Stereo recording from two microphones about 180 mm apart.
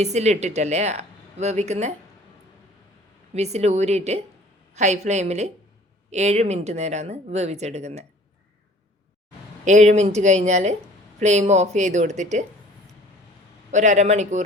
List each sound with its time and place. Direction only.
0.0 s speech: 40° right (ahead or behind)
3.3 s speech: 35° right (ahead or behind)
9.6 s speech: 40° right (ahead or behind)
13.7 s speech: 40° right (ahead or behind)